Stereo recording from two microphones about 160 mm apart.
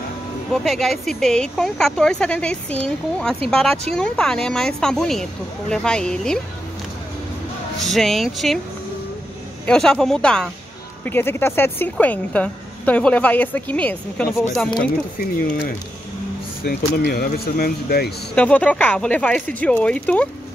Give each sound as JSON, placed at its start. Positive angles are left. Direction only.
{"t": 0.5, "sound": "speech", "side_deg": 0}
{"t": 7.8, "sound": "speech", "side_deg": 0}
{"t": 9.7, "sound": "a woman's voice", "side_deg": 5}
{"t": 16.6, "sound": "speech", "side_deg": 75}
{"t": 18.3, "sound": "a woman's voice", "side_deg": 10}